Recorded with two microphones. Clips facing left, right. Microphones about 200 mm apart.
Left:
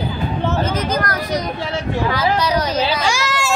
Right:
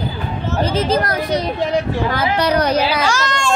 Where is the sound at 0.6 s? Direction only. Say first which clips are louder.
Right 3 dB; 30° right (ahead or behind).